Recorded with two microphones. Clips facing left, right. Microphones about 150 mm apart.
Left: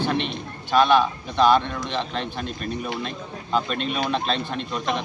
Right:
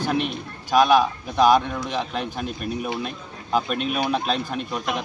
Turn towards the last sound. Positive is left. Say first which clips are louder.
# even
turn(degrees=-5)  # may be behind; listen again after turning